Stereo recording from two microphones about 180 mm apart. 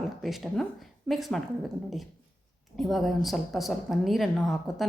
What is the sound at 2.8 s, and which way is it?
A woman's voice, centre (ahead or behind).